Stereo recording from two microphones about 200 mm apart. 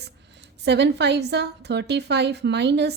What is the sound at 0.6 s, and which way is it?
A woman's voice, 55° right (ahead or behind).